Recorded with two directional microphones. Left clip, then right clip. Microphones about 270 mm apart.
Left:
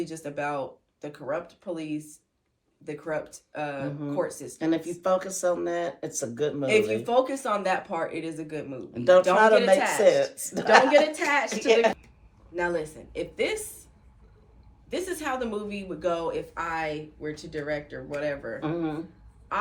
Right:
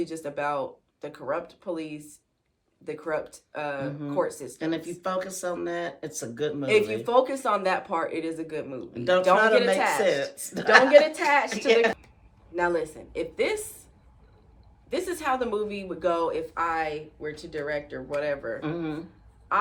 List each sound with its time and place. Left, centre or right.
0.0 s speech: centre
4.5 s speech: centre
7.0 s speech: centre
8.8 s speech: centre
9.7 s speech: centre
10.0 s speech: centre
10.9 s speech: centre
11.7 s speech: centre
12.5 s speech: centre
14.8 s speech: centre
18.6 s speech: centre
19.5 s quack: centre